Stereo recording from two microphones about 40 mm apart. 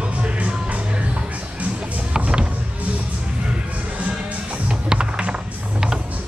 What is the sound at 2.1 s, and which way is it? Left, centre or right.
Music, right.